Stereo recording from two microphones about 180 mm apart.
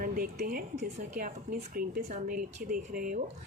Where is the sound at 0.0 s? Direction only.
50° right (ahead or behind).